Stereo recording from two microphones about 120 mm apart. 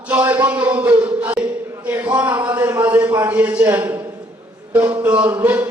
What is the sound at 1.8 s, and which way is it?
Speech, 15° right (ahead or behind).